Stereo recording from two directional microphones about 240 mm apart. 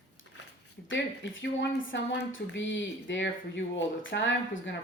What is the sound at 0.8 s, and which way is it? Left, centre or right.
A woman's voice, left.